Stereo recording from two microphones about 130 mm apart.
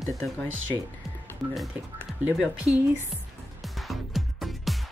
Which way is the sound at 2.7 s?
5° right (ahead or behind).